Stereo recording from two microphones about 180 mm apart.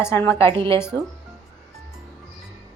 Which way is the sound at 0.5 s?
30° right (ahead or behind).